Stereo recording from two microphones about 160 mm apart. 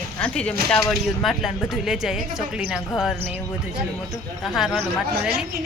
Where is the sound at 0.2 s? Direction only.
5° left (ahead or behind).